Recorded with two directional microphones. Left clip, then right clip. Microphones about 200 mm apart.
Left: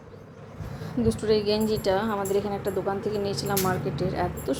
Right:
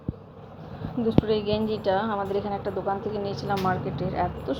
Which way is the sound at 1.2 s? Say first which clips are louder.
Left 2 dB; 35° left (ahead or behind).